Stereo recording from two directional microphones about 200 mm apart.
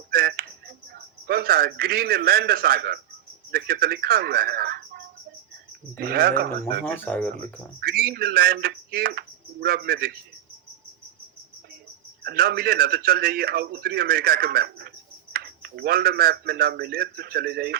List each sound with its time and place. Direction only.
0.1 s music: 50° right (ahead or behind)
0.9 s a man's voice: 50° right (ahead or behind)
6.8 s speech: 10° left (ahead or behind)
7.8 s a man's voice: 50° right (ahead or behind)
12.2 s a man's voice: 50° right (ahead or behind)